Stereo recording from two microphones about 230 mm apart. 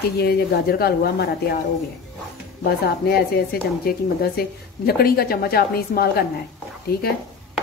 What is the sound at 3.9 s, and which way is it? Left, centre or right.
A woman's voice, left.